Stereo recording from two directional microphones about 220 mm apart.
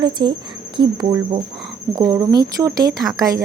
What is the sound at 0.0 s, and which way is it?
Cricket, 20° right (ahead or behind).